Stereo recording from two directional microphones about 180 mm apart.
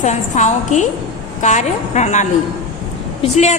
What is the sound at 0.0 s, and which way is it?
A woman's voice, 40° left (ahead or behind).